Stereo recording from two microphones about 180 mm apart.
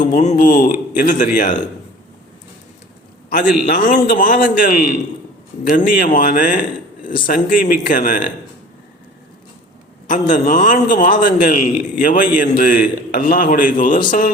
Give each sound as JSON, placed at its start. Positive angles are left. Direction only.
{"t": 0.0, "sound": "a man's voice", "side_deg": 45}
{"t": 3.7, "sound": "a man's voice", "side_deg": 50}
{"t": 10.1, "sound": "a man's voice", "side_deg": 45}